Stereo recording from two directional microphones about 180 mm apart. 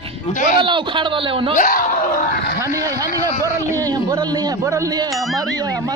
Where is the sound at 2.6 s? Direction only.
15° right (ahead or behind).